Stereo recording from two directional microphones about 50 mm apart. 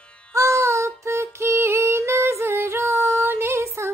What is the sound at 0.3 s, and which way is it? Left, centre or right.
Music, right.